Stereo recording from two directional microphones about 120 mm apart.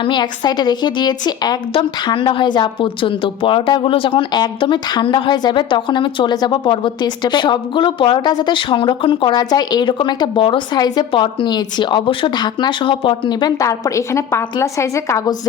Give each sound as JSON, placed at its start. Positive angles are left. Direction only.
{"t": 0.0, "sound": "a woman's voice", "side_deg": 40}
{"t": 13.6, "sound": "a woman's voice", "side_deg": 25}